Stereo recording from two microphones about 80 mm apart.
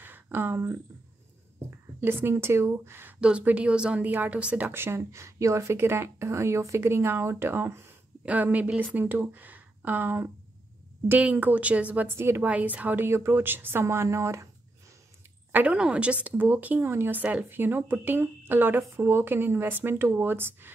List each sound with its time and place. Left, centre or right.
0.0 s a sound: right
2.0 s a woman's voice: right
3.2 s a woman's voice: centre; by 7.8 s right
8.3 s a woman's voice: centre
12.2 s a woman's voice: right
12.4 s a woman's voice: centre; by 14.5 s right
15.5 s a woman's voice: centre